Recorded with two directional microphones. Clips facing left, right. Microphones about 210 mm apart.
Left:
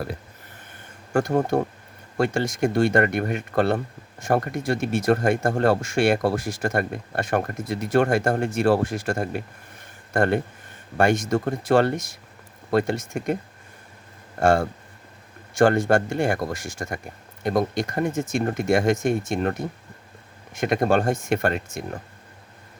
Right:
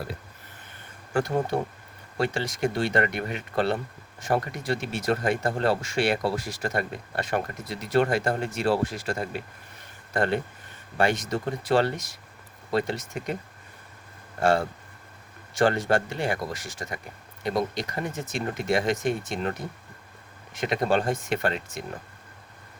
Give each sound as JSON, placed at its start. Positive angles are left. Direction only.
{"t": 1.1, "sound": "speech", "side_deg": 45}
{"t": 14.3, "sound": "speech", "side_deg": 45}